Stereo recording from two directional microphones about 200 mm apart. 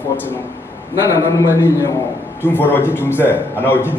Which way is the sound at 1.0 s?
15° left (ahead or behind).